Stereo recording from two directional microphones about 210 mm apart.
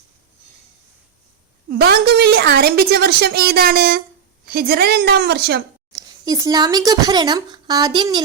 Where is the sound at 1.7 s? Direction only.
50° right (ahead or behind).